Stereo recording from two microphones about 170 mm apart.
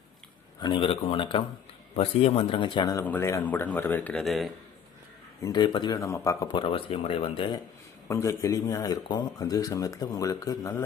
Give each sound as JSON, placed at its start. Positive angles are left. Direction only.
{"t": 0.6, "sound": "speech", "side_deg": 30}
{"t": 5.4, "sound": "speech", "side_deg": 25}
{"t": 6.5, "sound": "speech", "side_deg": 30}
{"t": 8.0, "sound": "speech", "side_deg": 15}